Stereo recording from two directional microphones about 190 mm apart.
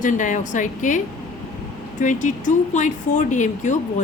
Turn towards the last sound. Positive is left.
turn(degrees=40)  # may be behind; listen again after turning